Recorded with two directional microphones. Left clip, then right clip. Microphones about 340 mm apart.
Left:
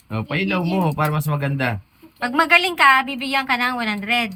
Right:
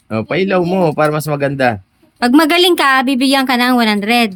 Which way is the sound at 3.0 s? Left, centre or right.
Centre.